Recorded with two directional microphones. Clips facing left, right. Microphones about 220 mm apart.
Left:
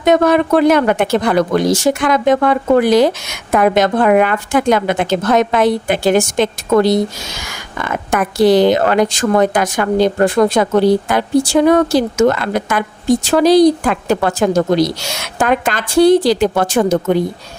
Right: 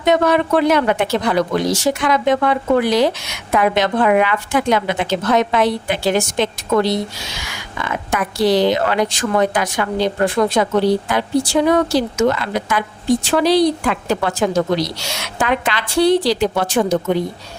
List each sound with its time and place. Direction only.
0.0 s speech: 45° left (ahead or behind)